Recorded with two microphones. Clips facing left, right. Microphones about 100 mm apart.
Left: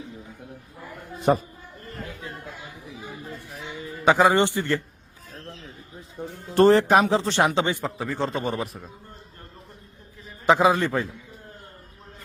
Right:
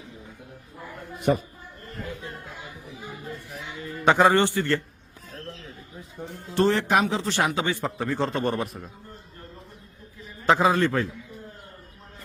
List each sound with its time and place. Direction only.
1.1 s speech: 35° left (ahead or behind)
3.8 s a man's voice: 5° left (ahead or behind)
4.4 s a man's voice: 20° left (ahead or behind)
6.5 s speech: 45° left (ahead or behind); by 7.8 s 25° left (ahead or behind)
7.9 s a man's voice: centre (ahead or behind)
10.4 s a man's voice: 15° left (ahead or behind)